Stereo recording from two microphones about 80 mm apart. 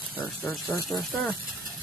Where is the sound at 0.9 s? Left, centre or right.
Left.